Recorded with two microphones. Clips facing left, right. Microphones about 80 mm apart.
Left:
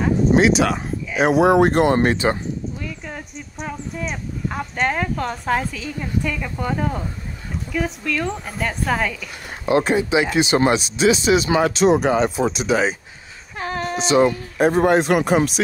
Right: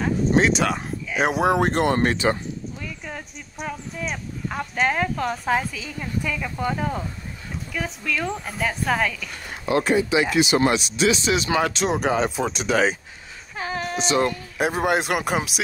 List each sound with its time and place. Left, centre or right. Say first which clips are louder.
0.0 s speech: left 4 dB; centre
1.8 s speech: left 4 dB; centre
2.8 s speech: left 3 dB; centre
9.7 s speech: left 2 dB; left
11.1 s speech: left 6 dB; centre
13.6 s a sound: left 3 dB; centre
14.6 s speech: left 6 dB; centre